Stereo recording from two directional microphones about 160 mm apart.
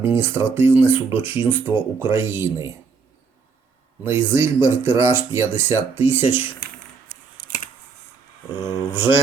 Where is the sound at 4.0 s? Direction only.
15° right (ahead or behind).